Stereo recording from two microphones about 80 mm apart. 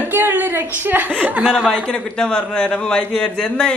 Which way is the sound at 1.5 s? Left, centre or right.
Centre.